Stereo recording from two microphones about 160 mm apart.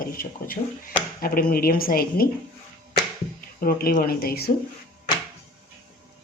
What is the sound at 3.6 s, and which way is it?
Speech, 65° left (ahead or behind).